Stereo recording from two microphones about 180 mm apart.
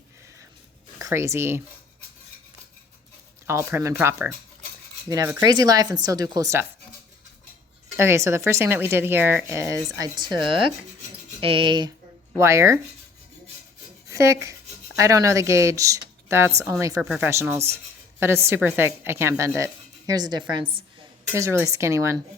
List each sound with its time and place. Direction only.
0.9 s speech: 15° right (ahead or behind)
3.4 s speech: 15° right (ahead or behind)
7.9 s speech: 15° right (ahead or behind)
14.1 s speech: 15° right (ahead or behind)